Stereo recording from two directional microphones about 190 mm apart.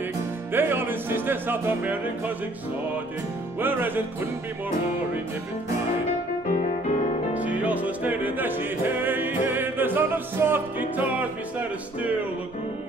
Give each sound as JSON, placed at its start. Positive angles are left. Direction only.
{"t": 0.5, "sound": "music", "side_deg": -10}
{"t": 3.5, "sound": "music", "side_deg": -10}
{"t": 6.5, "sound": "music", "side_deg": 45}
{"t": 7.3, "sound": "music", "side_deg": -10}